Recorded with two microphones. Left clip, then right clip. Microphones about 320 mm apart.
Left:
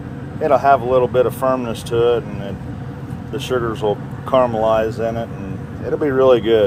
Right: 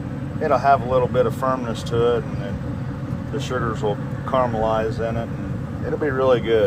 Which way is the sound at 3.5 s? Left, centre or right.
Left.